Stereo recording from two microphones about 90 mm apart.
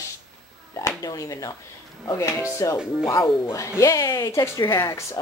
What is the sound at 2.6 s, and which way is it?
Speech, 40° left (ahead or behind).